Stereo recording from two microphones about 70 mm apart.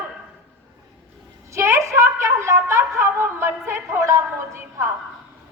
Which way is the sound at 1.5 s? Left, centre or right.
Right.